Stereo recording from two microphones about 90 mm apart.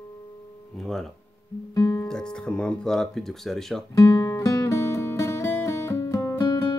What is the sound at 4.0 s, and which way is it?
Music, 40° left (ahead or behind).